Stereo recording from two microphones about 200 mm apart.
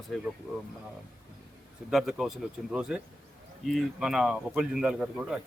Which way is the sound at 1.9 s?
Centre (ahead or behind).